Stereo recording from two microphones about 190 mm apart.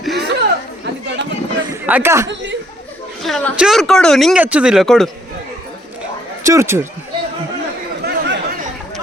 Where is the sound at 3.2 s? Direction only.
5° left (ahead or behind).